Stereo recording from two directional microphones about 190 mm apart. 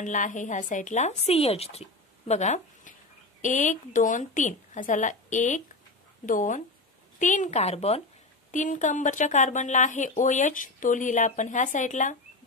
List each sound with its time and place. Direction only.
0.0 s speech: 40° left (ahead or behind)